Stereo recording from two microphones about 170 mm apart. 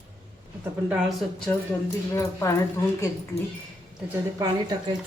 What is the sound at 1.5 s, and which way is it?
Speech, 10° left (ahead or behind).